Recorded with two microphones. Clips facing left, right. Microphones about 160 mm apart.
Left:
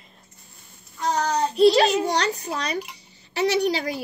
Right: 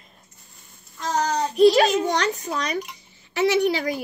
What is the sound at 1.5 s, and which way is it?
A child's voice, 30° left (ahead or behind).